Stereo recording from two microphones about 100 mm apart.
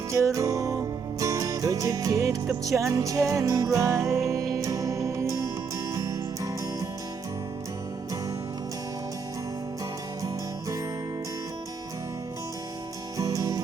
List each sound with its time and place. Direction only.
0.1 s music: 30° right (ahead or behind)
13.1 s music: 35° right (ahead or behind)